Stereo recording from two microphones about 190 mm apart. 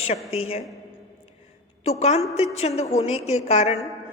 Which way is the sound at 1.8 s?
35° left (ahead or behind).